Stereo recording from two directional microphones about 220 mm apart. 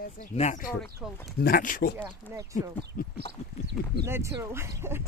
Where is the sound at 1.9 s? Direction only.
15° right (ahead or behind).